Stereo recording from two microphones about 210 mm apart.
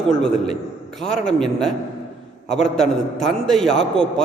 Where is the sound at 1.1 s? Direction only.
35° left (ahead or behind).